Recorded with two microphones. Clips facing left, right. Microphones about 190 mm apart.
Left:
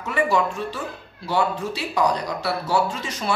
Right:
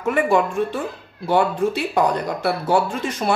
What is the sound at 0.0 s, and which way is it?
Speech, 55° right (ahead or behind).